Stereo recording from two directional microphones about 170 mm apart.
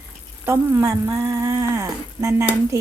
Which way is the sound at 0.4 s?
15° right (ahead or behind).